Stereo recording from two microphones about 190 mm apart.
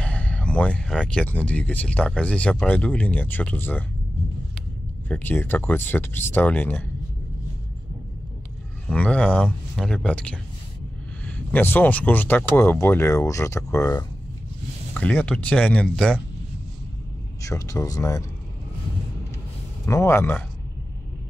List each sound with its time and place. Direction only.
0.0 s speech: 5° left (ahead or behind)
5.0 s speech: 10° left (ahead or behind)
8.8 s speech: 5° left (ahead or behind)
17.4 s speech: 15° left (ahead or behind)
19.9 s speech: 15° left (ahead or behind)